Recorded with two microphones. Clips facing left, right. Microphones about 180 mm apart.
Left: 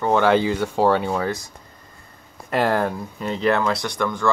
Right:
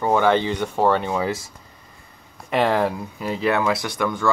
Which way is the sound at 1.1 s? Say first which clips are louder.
Even; 5° right (ahead or behind).